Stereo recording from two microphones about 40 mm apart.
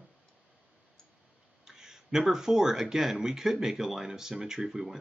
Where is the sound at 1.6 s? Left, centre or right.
Centre.